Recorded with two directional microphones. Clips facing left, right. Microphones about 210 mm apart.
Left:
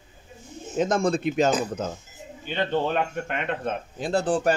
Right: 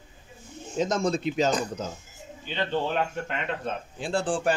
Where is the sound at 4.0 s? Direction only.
40° left (ahead or behind).